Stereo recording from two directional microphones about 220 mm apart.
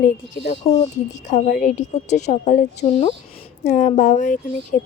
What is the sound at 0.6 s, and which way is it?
Speech, 30° left (ahead or behind).